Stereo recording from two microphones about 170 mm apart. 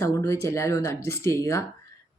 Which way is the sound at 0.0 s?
15° left (ahead or behind).